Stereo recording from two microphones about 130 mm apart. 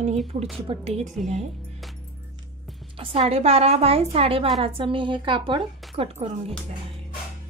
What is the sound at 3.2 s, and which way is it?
A woman's voice, 55° right (ahead or behind).